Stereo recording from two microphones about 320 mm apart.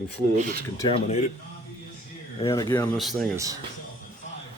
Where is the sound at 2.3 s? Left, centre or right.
Centre.